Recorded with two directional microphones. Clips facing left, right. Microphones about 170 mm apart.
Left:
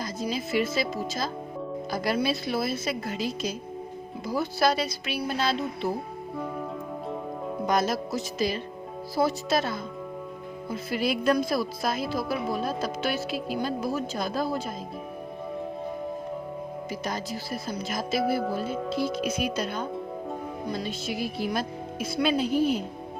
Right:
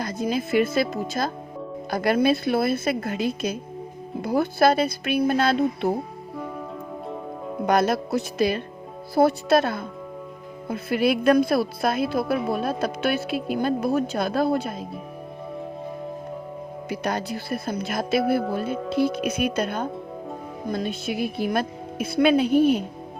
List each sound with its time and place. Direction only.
0.0 s speech: 55° right (ahead or behind)
6.3 s music: centre (ahead or behind)
7.7 s speech: 60° right (ahead or behind)
16.9 s speech: 65° right (ahead or behind)